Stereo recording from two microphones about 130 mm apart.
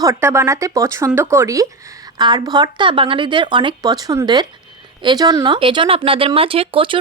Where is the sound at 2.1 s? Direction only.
35° right (ahead or behind).